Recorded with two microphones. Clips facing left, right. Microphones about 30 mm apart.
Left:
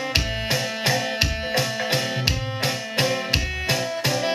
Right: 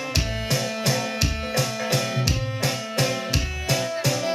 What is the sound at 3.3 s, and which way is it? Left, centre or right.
Music, left.